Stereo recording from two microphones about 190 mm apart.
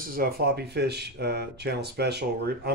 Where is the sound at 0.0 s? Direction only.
50° right (ahead or behind).